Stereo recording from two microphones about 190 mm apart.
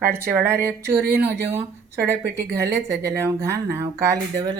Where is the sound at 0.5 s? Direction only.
15° right (ahead or behind).